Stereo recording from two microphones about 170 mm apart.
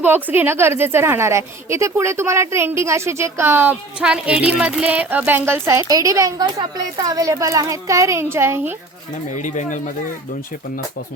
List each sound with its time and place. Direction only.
0.0 s a woman's voice: 10° right (ahead or behind)
9.3 s speech: 45° left (ahead or behind)